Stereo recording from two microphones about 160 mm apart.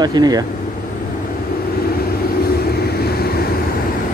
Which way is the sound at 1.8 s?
70° left (ahead or behind).